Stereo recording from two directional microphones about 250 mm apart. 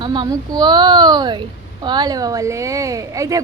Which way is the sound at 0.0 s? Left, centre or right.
Centre.